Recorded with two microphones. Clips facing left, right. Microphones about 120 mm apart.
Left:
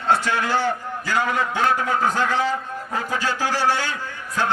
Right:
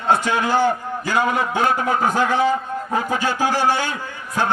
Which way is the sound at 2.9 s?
15° right (ahead or behind).